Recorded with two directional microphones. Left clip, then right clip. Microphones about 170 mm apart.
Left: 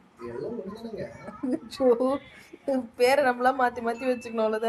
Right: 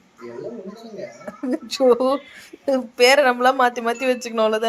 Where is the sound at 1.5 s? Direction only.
20° right (ahead or behind).